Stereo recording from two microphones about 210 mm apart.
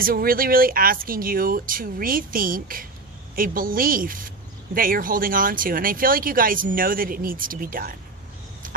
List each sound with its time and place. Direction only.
0.0 s a woman's voice: 45° right (ahead or behind)